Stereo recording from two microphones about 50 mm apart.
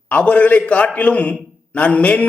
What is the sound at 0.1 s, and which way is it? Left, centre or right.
A man's voice, left.